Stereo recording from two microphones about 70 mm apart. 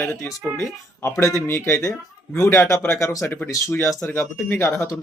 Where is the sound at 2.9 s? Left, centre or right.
Left.